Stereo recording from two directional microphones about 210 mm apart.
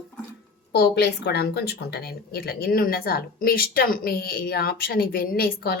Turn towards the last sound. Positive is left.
turn(degrees=45)  # may be behind; listen again after turning